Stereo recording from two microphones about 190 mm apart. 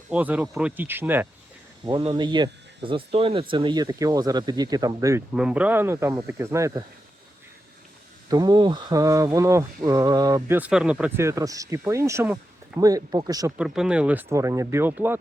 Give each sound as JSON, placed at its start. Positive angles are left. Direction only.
{"t": 0.1, "sound": "speech", "side_deg": -10}
{"t": 1.8, "sound": "speech", "side_deg": -25}
{"t": 5.3, "sound": "speech", "side_deg": -5}
{"t": 8.3, "sound": "speech", "side_deg": -20}
{"t": 13.6, "sound": "speech", "side_deg": -5}